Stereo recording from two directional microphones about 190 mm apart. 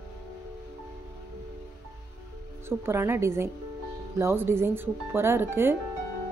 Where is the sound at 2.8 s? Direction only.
15° right (ahead or behind).